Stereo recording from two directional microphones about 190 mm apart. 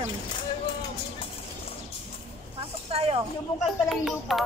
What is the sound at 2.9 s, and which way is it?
Speech, 30° right (ahead or behind).